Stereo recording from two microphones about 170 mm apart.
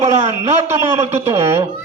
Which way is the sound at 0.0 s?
15° right (ahead or behind).